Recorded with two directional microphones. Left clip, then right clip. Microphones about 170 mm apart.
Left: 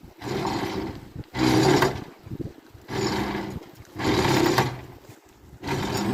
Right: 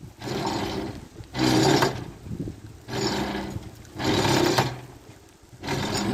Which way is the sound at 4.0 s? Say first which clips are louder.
Even; 5° right (ahead or behind).